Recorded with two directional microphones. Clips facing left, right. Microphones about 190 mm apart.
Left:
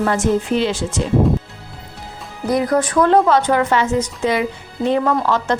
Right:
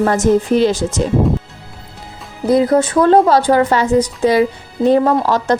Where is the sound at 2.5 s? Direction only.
25° right (ahead or behind).